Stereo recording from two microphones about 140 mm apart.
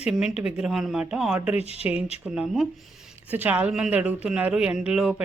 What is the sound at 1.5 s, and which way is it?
Speech, 45° left (ahead or behind).